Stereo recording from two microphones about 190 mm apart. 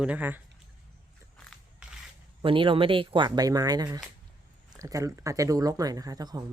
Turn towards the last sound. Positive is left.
turn(degrees=-20)  # may be behind; listen again after turning